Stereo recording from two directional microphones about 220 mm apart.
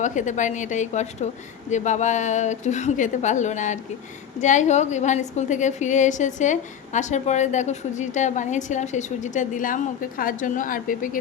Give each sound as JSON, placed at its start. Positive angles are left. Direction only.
{"t": 0.0, "sound": "a woman's voice", "side_deg": 35}